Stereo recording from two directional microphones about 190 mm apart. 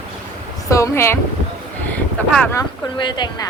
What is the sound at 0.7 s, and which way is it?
Speech, 15° left (ahead or behind).